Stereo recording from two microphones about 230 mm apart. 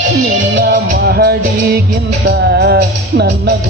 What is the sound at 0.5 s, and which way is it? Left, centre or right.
Music, right.